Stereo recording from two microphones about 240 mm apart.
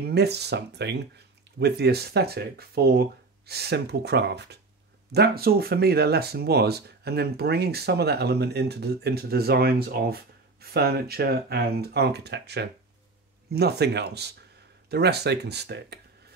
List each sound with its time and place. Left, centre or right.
0.0 s speech: right